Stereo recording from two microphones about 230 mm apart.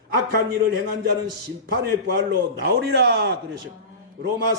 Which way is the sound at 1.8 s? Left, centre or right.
Right.